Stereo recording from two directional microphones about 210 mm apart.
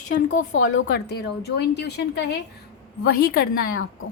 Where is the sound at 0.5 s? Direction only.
65° left (ahead or behind).